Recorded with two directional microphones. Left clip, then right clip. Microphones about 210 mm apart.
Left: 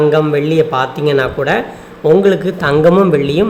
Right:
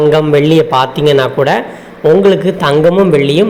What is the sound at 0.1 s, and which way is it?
A woman's voice, 5° right (ahead or behind).